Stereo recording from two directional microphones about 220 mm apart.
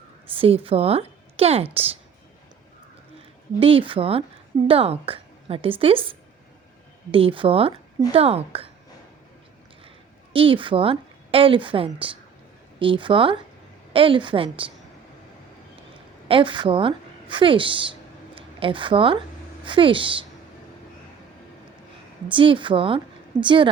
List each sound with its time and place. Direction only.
0.3 s a woman's voice: 25° right (ahead or behind)
3.6 s a woman's voice: 25° right (ahead or behind)
10.3 s a woman's voice: 25° right (ahead or behind)
16.3 s a woman's voice: 20° right (ahead or behind)
22.3 s a woman's voice: 20° right (ahead or behind)